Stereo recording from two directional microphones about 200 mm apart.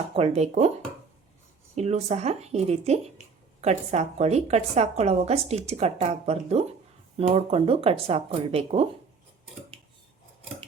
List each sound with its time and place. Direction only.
0.2 s a woman's voice: 35° right (ahead or behind)
1.7 s a woman's voice: 35° right (ahead or behind)